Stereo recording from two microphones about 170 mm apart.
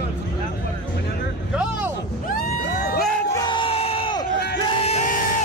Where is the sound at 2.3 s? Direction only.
55° left (ahead or behind).